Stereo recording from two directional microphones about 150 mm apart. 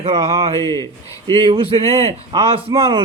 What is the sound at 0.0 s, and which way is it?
A man's voice, 40° right (ahead or behind).